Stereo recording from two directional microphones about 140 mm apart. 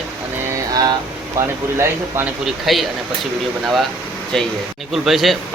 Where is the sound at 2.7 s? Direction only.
Centre (ahead or behind).